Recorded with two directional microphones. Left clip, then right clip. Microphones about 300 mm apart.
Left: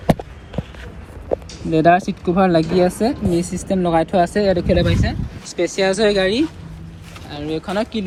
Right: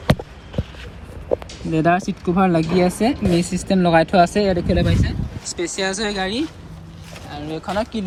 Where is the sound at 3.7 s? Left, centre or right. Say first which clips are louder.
Right 2 dB; right.